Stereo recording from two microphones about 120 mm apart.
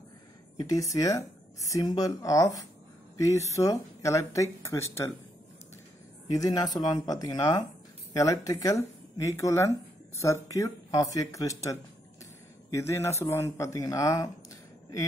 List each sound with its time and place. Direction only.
0.6 s speech: 30° left (ahead or behind)
6.2 s speech: 30° left (ahead or behind)